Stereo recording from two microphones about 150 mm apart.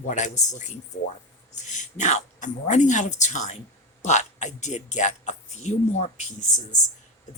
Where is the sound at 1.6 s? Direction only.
55° left (ahead or behind).